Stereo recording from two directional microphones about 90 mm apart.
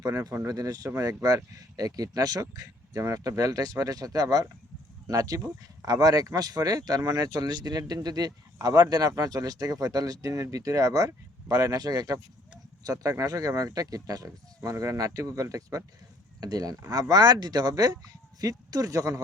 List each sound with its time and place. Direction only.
0.0 s speech: 35° right (ahead or behind)